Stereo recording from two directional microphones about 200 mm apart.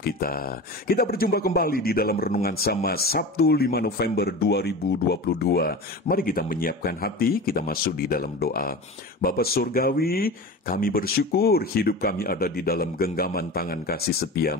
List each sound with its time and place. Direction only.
0.0 s a man's voice: 45° left (ahead or behind)